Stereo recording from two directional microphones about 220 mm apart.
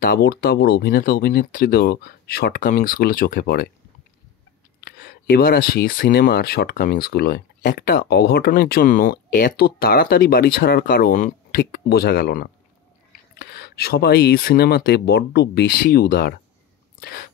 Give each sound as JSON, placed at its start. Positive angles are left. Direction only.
{"t": 0.0, "sound": "speech", "side_deg": 40}
{"t": 4.8, "sound": "speech", "side_deg": 45}